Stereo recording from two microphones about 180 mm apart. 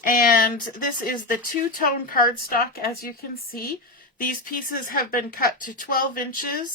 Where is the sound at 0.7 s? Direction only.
50° left (ahead or behind).